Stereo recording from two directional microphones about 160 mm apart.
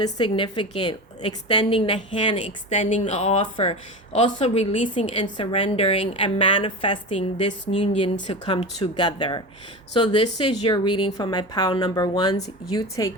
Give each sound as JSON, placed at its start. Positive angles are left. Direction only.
{"t": 0.0, "sound": "speech", "side_deg": 30}
{"t": 5.1, "sound": "a woman's voice", "side_deg": 35}